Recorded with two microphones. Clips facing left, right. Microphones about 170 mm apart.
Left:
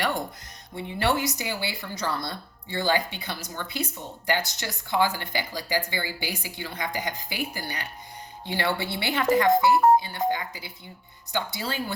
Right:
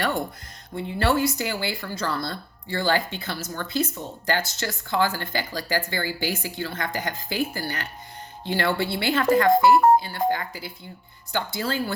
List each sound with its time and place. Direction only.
0.8 s speech: 15° left (ahead or behind)